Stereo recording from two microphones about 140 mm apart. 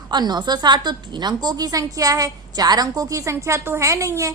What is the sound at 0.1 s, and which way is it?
A woman's voice, 30° right (ahead or behind).